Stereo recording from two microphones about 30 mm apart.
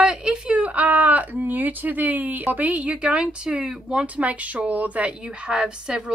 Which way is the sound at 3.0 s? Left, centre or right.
Right.